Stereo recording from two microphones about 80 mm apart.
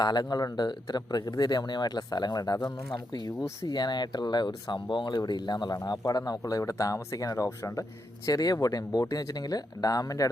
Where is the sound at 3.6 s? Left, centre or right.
Left.